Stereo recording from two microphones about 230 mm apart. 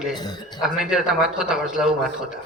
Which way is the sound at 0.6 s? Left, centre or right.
Centre.